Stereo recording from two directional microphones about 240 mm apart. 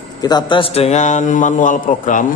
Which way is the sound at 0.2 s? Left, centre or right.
Centre.